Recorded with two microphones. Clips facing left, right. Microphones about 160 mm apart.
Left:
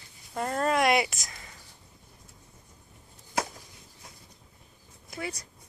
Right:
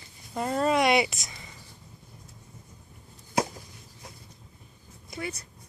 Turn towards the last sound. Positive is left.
turn(degrees=10)  # may be behind; listen again after turning